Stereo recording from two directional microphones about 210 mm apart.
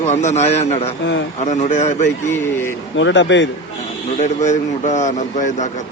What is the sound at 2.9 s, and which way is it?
Speech, 60° left (ahead or behind).